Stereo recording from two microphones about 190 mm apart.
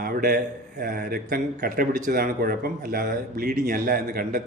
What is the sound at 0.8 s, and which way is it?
Speech, 50° right (ahead or behind).